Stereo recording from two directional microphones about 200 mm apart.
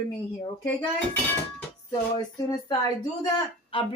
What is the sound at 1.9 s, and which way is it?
Speech, 20° left (ahead or behind).